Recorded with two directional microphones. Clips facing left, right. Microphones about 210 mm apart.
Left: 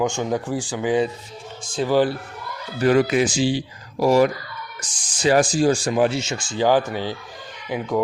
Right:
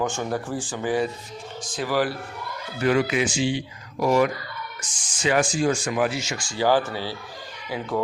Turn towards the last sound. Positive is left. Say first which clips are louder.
# left 4 dB
turn(degrees=15)  # may be behind; listen again after turning